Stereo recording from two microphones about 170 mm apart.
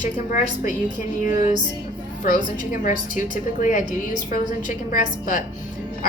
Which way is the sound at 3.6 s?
50° left (ahead or behind).